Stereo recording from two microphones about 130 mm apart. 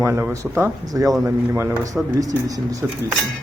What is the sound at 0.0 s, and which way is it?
Speech, 20° right (ahead or behind).